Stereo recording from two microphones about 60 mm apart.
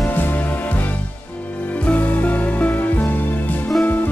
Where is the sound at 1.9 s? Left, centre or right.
Left.